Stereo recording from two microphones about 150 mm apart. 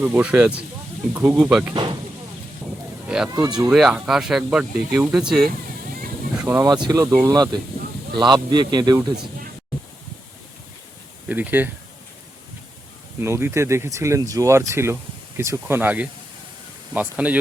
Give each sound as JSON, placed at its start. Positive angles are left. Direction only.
{"t": 0.0, "sound": "speech", "side_deg": -10}
{"t": 1.7, "sound": "speech", "side_deg": -30}
{"t": 3.1, "sound": "speech", "side_deg": -5}
{"t": 6.3, "sound": "a sound", "side_deg": -10}
{"t": 6.8, "sound": "speech", "side_deg": -25}
{"t": 11.3, "sound": "speech", "side_deg": -10}
{"t": 13.1, "sound": "speech", "side_deg": -15}